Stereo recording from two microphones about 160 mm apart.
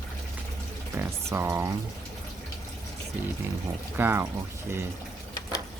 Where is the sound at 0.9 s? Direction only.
15° right (ahead or behind).